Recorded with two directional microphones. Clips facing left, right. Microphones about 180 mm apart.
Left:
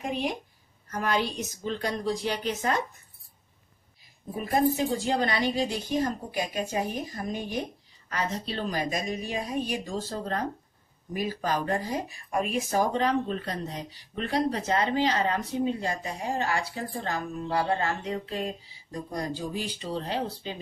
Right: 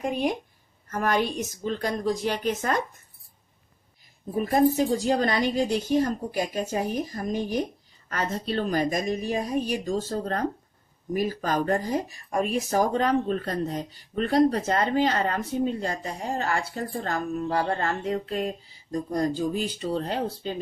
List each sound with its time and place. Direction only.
0.1 s speech: 50° right (ahead or behind)
4.7 s a woman's voice: 40° right (ahead or behind)
8.1 s speech: 50° right (ahead or behind)